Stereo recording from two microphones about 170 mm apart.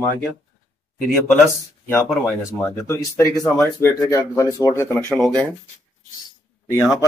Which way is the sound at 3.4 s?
5° left (ahead or behind).